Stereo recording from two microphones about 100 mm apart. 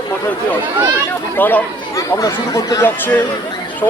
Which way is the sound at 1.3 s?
20° left (ahead or behind).